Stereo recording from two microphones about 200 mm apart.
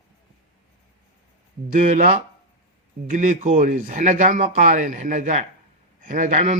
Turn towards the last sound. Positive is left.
turn(degrees=-35)  # may be behind; listen again after turning